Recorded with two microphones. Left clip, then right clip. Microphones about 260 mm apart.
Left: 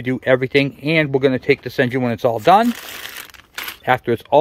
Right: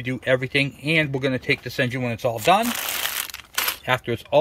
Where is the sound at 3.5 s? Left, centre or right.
Centre.